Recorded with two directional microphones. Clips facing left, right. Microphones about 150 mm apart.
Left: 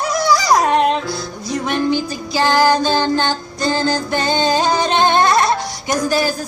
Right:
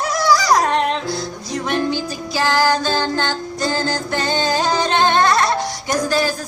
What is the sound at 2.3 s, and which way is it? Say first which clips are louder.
Child singing: left 3 dB; 20° left (ahead or behind).